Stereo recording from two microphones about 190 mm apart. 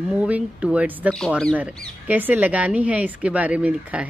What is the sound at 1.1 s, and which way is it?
Speech, 5° left (ahead or behind).